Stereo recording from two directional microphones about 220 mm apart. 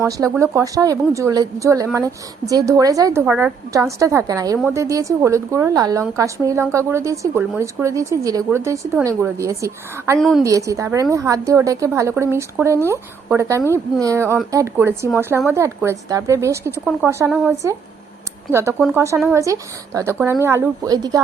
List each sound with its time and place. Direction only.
0.0 s a woman's voice: 15° right (ahead or behind)
10.2 s a woman's voice: centre (ahead or behind)
10.4 s a woman's voice: 15° right (ahead or behind)